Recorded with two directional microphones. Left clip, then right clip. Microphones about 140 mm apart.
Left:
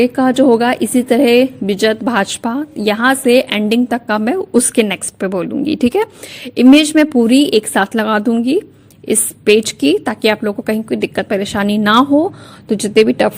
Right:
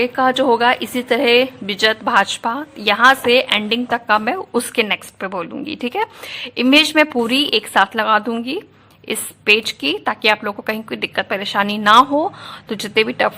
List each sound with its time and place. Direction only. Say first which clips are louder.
0.0 s a woman's voice: left 3 dB; 35° left (ahead or behind)
12.2 s a woman's voice: left 3 dB; 25° left (ahead or behind)